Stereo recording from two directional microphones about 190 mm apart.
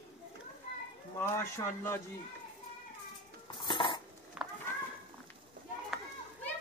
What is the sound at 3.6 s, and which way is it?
Cutlery, 25° left (ahead or behind).